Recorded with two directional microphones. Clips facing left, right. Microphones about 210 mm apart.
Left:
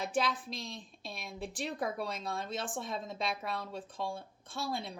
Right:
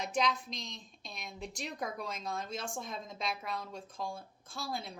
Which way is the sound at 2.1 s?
Centre (ahead or behind).